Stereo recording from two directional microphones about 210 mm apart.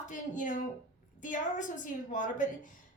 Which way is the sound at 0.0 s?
35° left (ahead or behind).